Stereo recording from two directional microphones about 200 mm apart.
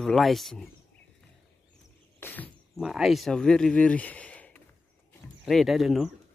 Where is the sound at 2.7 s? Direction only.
Centre (ahead or behind).